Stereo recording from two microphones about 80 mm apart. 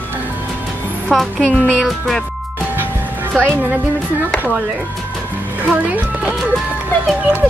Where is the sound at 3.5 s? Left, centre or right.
Centre.